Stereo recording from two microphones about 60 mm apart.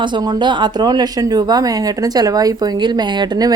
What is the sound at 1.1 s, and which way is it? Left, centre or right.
A woman's voice, right.